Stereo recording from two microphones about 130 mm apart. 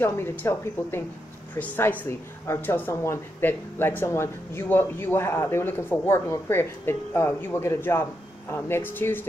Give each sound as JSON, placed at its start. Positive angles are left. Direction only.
{"t": 0.0, "sound": "speech", "side_deg": 15}